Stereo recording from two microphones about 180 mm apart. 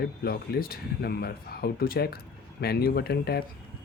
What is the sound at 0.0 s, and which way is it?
Speech, 60° left (ahead or behind).